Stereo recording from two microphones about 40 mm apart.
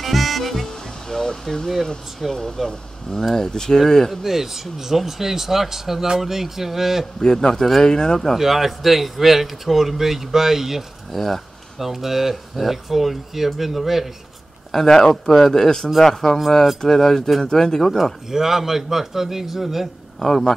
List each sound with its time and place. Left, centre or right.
0.0 s music: centre
2.1 s speech: centre
4.1 s speech: centre
7.2 s speech: centre
8.4 s speech: centre
11.1 s speech: centre
11.8 s speech: centre
14.7 s speech: centre
18.3 s speech: centre
20.2 s speech: centre